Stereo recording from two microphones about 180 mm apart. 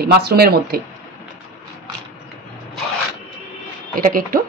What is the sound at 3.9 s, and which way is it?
Speech, 50° right (ahead or behind).